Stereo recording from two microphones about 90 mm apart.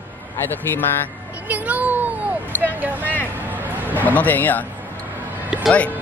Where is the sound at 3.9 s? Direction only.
20° left (ahead or behind).